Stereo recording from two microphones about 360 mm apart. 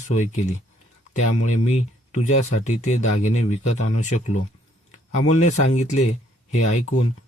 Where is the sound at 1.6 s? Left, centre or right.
Centre.